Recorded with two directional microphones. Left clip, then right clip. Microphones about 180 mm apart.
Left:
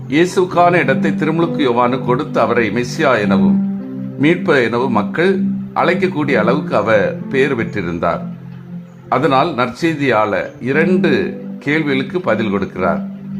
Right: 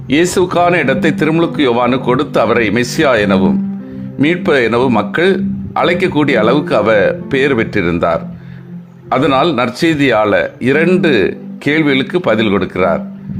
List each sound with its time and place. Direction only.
0.1 s speech: 30° right (ahead or behind)